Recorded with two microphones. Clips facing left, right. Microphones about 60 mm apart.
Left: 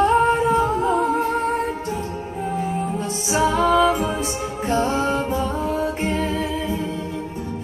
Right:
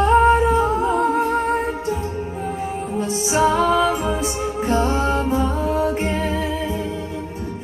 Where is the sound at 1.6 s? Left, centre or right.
Centre.